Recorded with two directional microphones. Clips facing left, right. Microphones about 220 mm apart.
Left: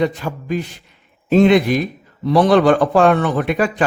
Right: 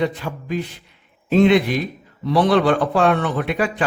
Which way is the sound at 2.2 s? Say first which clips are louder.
Left 4 dB; 45° left (ahead or behind).